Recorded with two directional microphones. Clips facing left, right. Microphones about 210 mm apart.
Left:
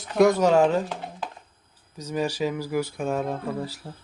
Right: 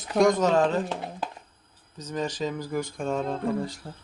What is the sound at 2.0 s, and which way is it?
Speech, 10° left (ahead or behind).